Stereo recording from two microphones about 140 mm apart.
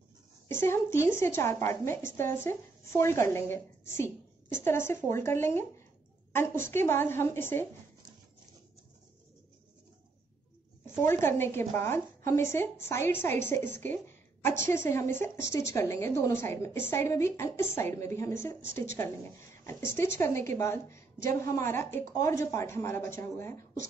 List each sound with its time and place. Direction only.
0.5 s a woman's voice: 15° left (ahead or behind)
10.9 s a woman's voice: 15° left (ahead or behind)